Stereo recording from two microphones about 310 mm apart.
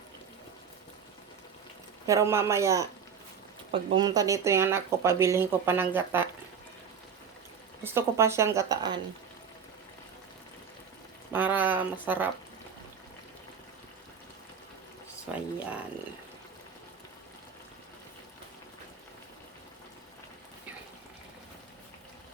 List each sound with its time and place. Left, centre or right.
2.0 s speech: centre
7.9 s speech: centre
11.3 s speech: centre
15.3 s speech: centre